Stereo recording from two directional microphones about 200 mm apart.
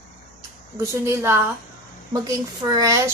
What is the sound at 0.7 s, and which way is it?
A woman's voice, 15° right (ahead or behind).